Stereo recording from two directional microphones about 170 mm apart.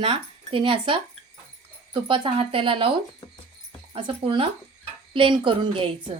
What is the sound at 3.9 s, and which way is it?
A woman's voice, 30° right (ahead or behind).